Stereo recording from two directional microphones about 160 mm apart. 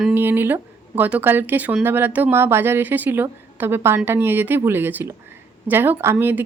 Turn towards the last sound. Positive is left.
turn(degrees=-15)  # may be behind; listen again after turning